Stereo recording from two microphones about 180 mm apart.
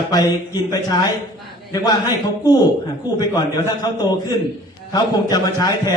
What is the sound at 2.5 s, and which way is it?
A man's voice, 20° left (ahead or behind).